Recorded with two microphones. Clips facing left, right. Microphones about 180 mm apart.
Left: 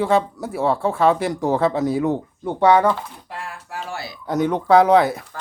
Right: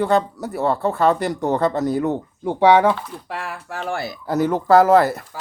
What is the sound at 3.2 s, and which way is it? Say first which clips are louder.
Speech: right 4 dB; 70° right (ahead or behind).